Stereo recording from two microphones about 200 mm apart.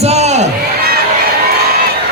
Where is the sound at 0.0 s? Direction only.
35° right (ahead or behind).